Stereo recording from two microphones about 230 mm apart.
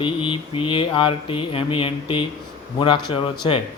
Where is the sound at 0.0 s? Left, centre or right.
Left.